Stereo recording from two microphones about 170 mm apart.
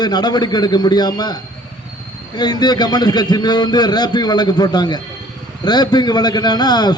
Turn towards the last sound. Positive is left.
turn(degrees=25)  # may be behind; listen again after turning